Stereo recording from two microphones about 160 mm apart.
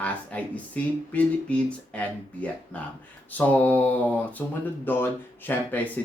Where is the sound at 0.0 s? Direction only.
10° left (ahead or behind).